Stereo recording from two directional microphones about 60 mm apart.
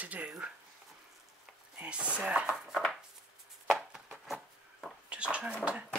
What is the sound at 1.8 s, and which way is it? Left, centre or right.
Speech, centre.